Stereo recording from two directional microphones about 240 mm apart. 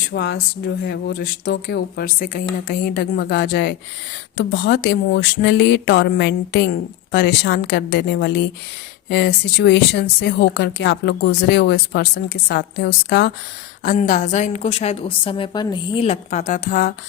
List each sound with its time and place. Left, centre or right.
0.1 s speech: left
13.8 s a woman's voice: left